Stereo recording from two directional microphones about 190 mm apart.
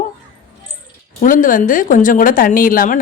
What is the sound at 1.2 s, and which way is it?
Speech, 45° left (ahead or behind).